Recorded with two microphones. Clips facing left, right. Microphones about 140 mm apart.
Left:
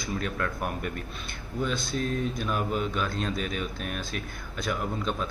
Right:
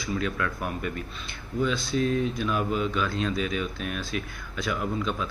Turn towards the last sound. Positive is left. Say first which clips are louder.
# right 1 dB
turn(degrees=40)  # may be behind; listen again after turning